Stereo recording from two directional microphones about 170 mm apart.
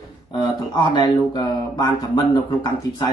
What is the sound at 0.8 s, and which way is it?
Speech, 25° left (ahead or behind).